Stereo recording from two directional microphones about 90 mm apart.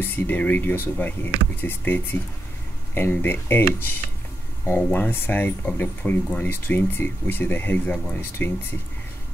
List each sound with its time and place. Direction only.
0.0 s speech: 20° left (ahead or behind)